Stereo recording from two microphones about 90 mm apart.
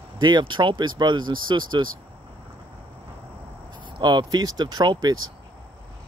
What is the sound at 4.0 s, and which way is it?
Speech, 55° right (ahead or behind).